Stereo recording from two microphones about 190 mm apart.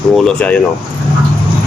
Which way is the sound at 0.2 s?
5° left (ahead or behind).